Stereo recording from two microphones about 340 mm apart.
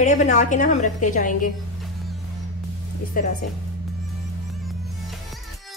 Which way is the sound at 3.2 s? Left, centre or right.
Left.